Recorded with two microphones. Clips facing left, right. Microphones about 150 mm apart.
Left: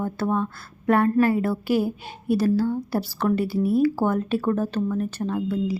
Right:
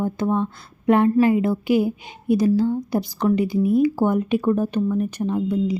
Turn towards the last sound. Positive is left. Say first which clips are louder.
# right 3 dB
turn(degrees=-20)  # may be behind; listen again after turning